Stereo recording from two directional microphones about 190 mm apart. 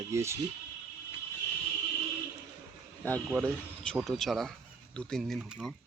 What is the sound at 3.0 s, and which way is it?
Speech, 10° left (ahead or behind).